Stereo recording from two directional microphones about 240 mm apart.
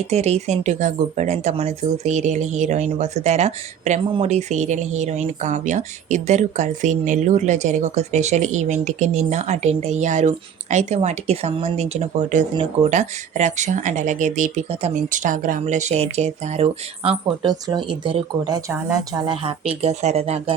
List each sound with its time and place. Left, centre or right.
0.1 s speech: right